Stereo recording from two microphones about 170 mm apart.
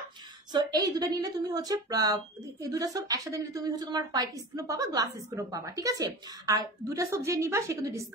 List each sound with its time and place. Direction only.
0.5 s a woman's voice: 25° right (ahead or behind)